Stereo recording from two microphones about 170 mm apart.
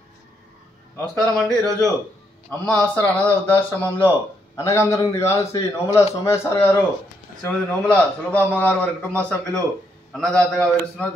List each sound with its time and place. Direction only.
1.2 s a man's voice: 20° right (ahead or behind)
2.6 s a man's voice: 5° left (ahead or behind)